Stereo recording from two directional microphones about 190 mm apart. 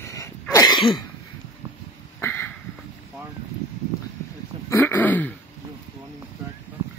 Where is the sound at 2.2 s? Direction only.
10° left (ahead or behind).